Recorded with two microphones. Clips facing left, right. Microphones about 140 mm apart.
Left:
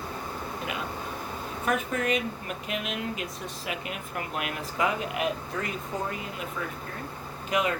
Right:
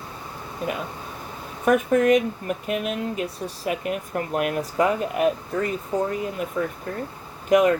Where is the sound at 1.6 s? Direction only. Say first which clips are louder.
Right 10 dB; 50° right (ahead or behind).